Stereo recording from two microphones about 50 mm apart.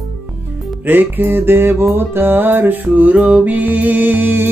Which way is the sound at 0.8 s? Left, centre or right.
Right.